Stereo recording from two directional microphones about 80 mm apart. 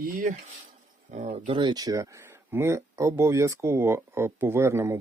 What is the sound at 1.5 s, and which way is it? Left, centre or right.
Speech, right.